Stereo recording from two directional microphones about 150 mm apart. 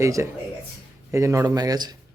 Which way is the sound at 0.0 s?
20° right (ahead or behind).